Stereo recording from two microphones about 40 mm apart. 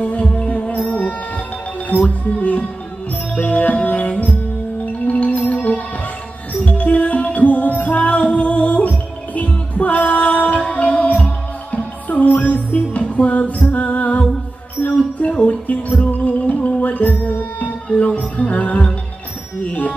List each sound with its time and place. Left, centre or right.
0.0 s music: left
9.8 s a capella: left
10.6 s music: left
14.8 s music: left
17.8 s music: left